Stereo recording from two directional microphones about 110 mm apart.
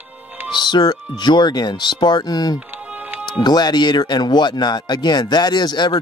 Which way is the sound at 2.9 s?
10° right (ahead or behind).